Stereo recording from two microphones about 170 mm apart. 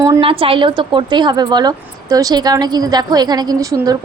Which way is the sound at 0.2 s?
35° right (ahead or behind).